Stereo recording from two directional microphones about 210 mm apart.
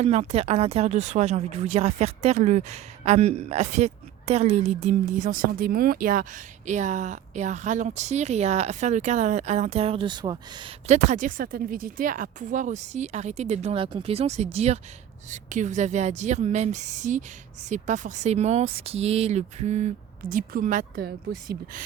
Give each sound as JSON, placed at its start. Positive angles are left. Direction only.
{"t": 0.0, "sound": "speech", "side_deg": -30}
{"t": 10.8, "sound": "speech", "side_deg": -35}